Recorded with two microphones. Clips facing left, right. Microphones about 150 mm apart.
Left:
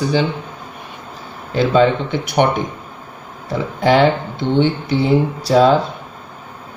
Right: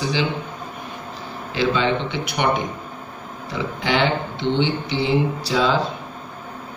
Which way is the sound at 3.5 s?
45° left (ahead or behind).